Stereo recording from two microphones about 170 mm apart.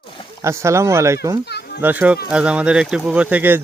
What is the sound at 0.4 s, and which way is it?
Speech, 15° right (ahead or behind).